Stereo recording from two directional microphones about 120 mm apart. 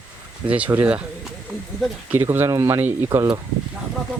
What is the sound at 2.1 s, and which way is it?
Speech, 20° right (ahead or behind).